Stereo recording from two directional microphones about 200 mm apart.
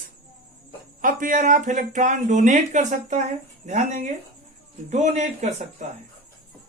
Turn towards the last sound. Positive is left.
turn(degrees=-35)  # may be behind; listen again after turning